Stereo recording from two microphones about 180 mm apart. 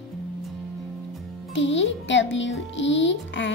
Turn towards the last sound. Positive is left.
turn(degrees=90)